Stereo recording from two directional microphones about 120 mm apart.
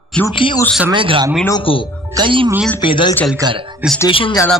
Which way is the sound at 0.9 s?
45° right (ahead or behind).